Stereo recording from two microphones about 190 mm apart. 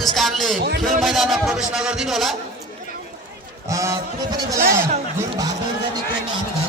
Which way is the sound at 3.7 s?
15° right (ahead or behind).